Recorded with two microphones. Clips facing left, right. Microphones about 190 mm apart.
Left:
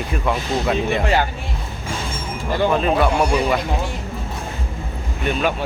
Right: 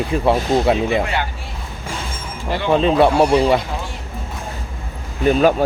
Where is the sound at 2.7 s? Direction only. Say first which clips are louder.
Right 8 dB; 30° right (ahead or behind).